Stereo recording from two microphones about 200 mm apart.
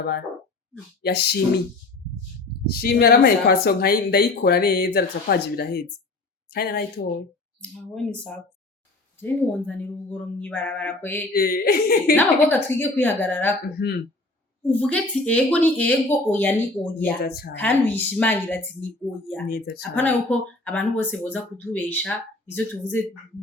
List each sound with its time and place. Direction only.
1.0 s speech: 55° left (ahead or behind)
2.6 s speech: 50° left (ahead or behind)
7.6 s speech: 5° left (ahead or behind)
11.3 s speech: 50° left (ahead or behind)
12.1 s speech: 10° left (ahead or behind)
14.7 s speech: 5° left (ahead or behind)
17.2 s speech: 55° left (ahead or behind)
17.6 s speech: 10° left (ahead or behind)
19.5 s speech: 50° left (ahead or behind)
19.8 s speech: 10° left (ahead or behind)